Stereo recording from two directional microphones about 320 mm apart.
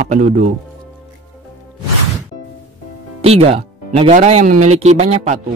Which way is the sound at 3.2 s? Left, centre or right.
Centre.